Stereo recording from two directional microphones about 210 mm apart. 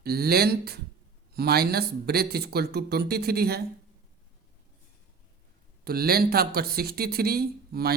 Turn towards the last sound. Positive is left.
turn(degrees=-45)  # may be behind; listen again after turning